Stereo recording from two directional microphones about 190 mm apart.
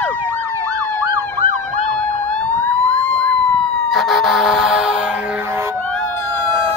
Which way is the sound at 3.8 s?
Centre (ahead or behind).